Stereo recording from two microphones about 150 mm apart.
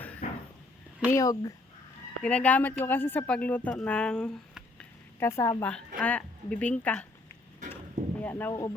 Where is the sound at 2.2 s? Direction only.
10° left (ahead or behind).